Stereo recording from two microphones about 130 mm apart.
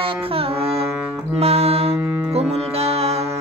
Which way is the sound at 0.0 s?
45° right (ahead or behind).